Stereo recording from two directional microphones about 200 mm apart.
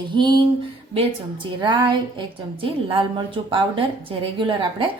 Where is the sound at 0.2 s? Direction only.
20° right (ahead or behind).